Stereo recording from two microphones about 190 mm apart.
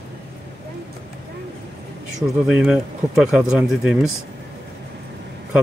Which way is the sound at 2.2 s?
5° right (ahead or behind).